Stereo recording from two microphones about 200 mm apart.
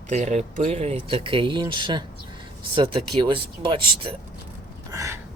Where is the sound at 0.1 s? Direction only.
35° right (ahead or behind).